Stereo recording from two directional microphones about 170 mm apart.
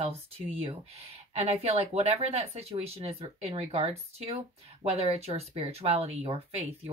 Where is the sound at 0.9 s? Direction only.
40° right (ahead or behind).